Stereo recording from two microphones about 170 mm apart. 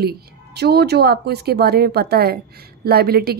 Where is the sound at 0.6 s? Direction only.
70° right (ahead or behind).